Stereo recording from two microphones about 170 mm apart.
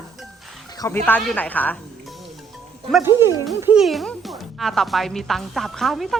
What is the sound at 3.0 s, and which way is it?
Speech, 15° right (ahead or behind).